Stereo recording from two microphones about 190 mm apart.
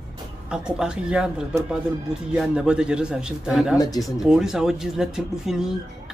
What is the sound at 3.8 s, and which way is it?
Speech, 20° left (ahead or behind).